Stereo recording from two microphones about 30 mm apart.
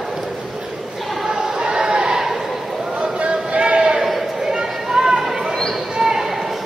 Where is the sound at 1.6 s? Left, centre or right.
Right.